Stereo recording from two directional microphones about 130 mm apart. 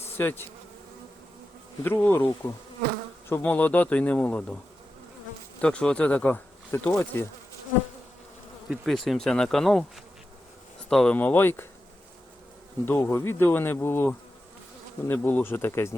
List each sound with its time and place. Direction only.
0.0 s bee: 15° left (ahead or behind)
1.8 s insect: 15° left (ahead or behind)
3.2 s insect: 15° left (ahead or behind)
5.6 s insect: 10° left (ahead or behind)
8.7 s bee: centre (ahead or behind)
10.8 s insect: 5° left (ahead or behind)
12.8 s insect: 20° left (ahead or behind)